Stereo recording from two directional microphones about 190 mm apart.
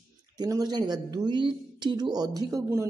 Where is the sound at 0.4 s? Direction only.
20° right (ahead or behind).